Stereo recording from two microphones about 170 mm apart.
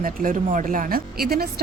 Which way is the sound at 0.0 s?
50° right (ahead or behind).